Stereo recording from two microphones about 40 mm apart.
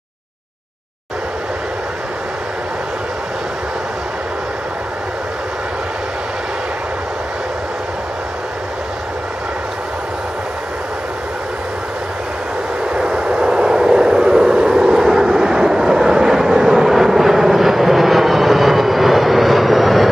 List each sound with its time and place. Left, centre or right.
12.9 s vehicle: centre
14.8 s vehicle: centre